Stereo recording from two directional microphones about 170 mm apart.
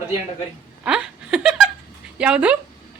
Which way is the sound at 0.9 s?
5° right (ahead or behind).